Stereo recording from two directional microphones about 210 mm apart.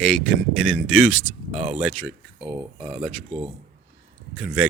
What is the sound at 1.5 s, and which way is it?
Speech, 30° right (ahead or behind).